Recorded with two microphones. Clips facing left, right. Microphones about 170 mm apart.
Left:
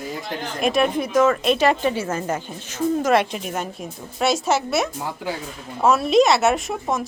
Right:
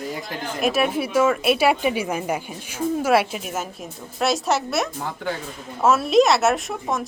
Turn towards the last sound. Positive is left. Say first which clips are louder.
# left 1 dB
turn(degrees=0)  # may be behind; listen again after turning